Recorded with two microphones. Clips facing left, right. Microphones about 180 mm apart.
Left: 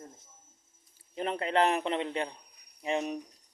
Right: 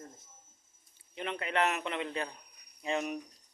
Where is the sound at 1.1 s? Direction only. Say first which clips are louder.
Left 5 dB; 35° left (ahead or behind).